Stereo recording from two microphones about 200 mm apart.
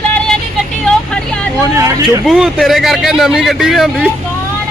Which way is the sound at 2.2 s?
Centre (ahead or behind).